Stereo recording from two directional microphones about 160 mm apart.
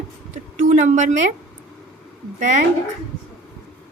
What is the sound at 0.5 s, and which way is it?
Speech, 50° right (ahead or behind).